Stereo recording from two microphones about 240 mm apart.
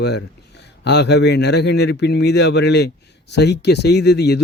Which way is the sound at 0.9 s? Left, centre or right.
Left.